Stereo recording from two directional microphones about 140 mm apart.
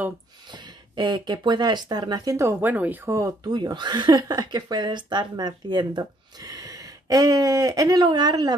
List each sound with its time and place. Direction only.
0.5 s speech: 30° right (ahead or behind)